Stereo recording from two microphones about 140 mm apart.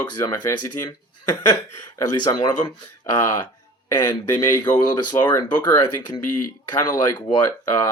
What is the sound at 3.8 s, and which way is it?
Speech, 25° left (ahead or behind).